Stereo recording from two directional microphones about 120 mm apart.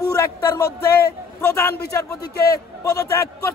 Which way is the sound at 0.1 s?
25° left (ahead or behind).